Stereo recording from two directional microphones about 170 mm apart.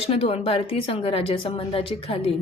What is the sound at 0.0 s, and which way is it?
A woman's voice, 35° left (ahead or behind).